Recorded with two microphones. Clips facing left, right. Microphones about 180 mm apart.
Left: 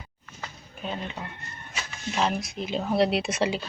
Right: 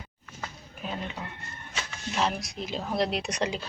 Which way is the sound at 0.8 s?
5° right (ahead or behind).